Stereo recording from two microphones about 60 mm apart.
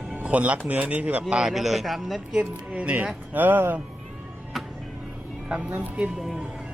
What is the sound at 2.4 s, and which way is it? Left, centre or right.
Speech, right.